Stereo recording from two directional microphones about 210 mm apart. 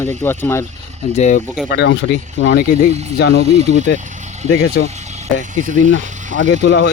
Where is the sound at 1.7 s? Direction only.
55° left (ahead or behind).